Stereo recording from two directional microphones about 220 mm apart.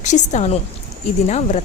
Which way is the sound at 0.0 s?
35° left (ahead or behind).